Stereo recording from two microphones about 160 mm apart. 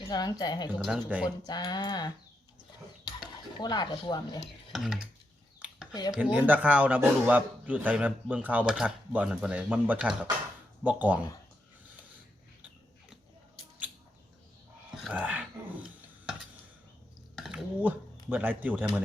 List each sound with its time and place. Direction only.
0.1 s speech: 25° left (ahead or behind)
0.8 s a sound: centre (ahead or behind)
1.2 s speech: 25° left (ahead or behind)
3.6 s speech: 25° left (ahead or behind)
4.7 s a sound: centre (ahead or behind)
6.1 s speech: 5° right (ahead or behind)
15.0 s dog: 10° right (ahead or behind)
17.3 s speech: centre (ahead or behind)